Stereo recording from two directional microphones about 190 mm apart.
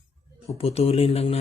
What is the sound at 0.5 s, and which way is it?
Speech, 30° left (ahead or behind).